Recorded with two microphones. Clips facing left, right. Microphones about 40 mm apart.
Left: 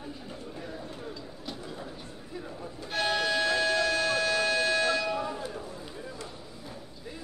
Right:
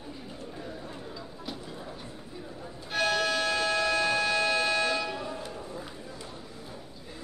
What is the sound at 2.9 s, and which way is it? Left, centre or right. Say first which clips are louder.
Music: right 1 dB; centre.